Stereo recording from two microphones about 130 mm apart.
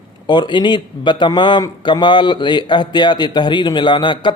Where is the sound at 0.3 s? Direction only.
35° left (ahead or behind).